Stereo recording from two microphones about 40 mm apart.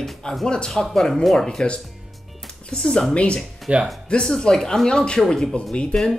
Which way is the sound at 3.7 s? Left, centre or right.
Right.